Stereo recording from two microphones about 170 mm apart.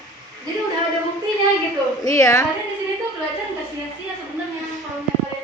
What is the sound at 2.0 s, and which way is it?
Speech, 20° left (ahead or behind).